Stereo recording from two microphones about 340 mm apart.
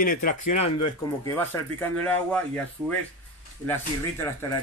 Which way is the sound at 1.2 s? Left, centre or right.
Centre.